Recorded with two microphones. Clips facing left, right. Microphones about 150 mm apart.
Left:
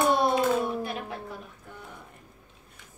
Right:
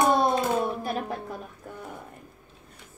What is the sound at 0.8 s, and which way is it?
Music, 40° right (ahead or behind).